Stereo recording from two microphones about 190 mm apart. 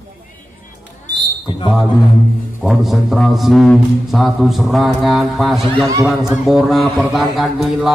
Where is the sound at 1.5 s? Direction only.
25° left (ahead or behind).